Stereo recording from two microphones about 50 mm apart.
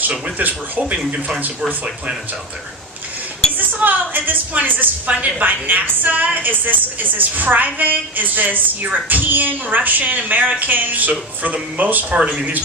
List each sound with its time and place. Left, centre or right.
0.3 s a woman's voice: right
3.6 s a woman's voice: right